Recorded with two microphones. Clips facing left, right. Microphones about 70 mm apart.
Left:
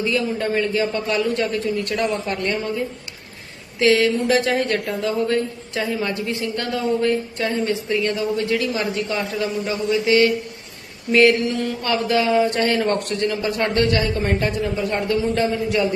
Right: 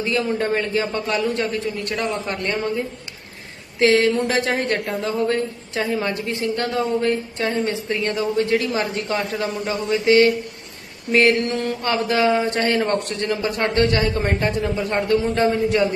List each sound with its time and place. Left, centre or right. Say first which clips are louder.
0.1 s a man's voice: right 1 dB; right
3.8 s a man's voice: right 1 dB; right